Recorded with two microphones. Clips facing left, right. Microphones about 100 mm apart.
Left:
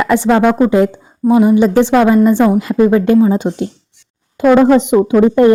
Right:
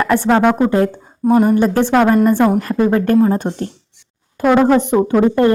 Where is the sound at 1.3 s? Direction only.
5° left (ahead or behind).